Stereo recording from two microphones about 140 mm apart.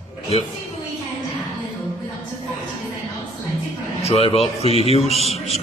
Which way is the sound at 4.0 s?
45° left (ahead or behind).